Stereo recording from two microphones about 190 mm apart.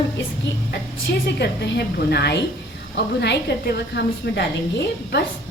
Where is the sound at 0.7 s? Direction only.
60° left (ahead or behind).